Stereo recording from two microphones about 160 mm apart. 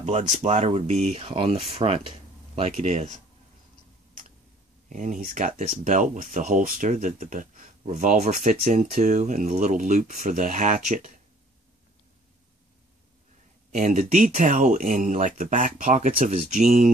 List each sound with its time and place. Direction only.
0.0 s speech: 45° right (ahead or behind)
4.8 s speech: 50° right (ahead or behind)
13.7 s speech: 55° right (ahead or behind)